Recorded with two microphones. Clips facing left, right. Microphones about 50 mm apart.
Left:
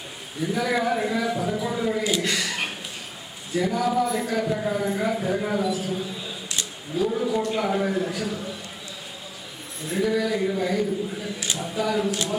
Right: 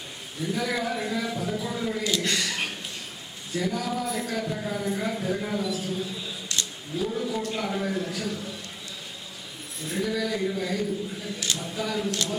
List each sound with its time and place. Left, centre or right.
0.4 s speech: centre
2.2 s speech: centre
7.1 s speech: centre
9.9 s speech: centre
11.5 s speech: centre